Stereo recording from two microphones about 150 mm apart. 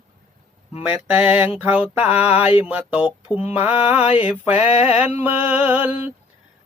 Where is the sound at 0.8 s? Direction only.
10° right (ahead or behind).